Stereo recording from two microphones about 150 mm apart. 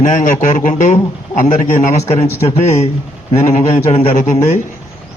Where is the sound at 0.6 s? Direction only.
55° left (ahead or behind).